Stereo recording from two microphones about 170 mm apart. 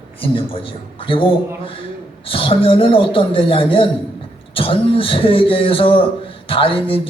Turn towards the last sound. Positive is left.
turn(degrees=30)  # may be behind; listen again after turning